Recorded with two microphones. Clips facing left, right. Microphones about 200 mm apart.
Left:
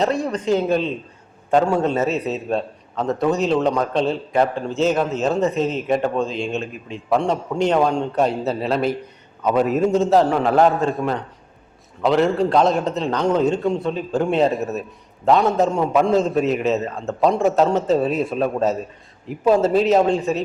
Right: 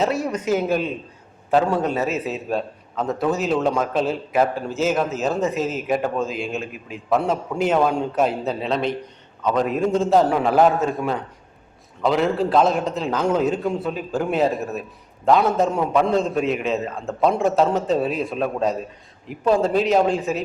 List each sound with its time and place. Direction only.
0.0 s a man's voice: 5° right (ahead or behind)